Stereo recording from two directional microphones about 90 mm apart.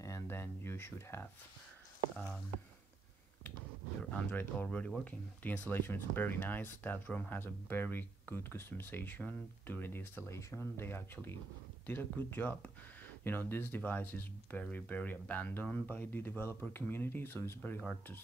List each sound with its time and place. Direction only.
0.0 s speech: 30° left (ahead or behind)
4.1 s speech: 20° left (ahead or behind)